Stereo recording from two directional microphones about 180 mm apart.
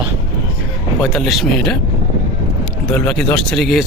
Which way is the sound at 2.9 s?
5° left (ahead or behind).